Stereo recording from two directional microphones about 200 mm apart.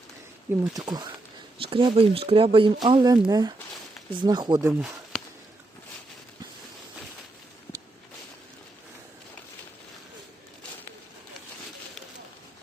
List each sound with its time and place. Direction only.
0.6 s speech: 20° right (ahead or behind)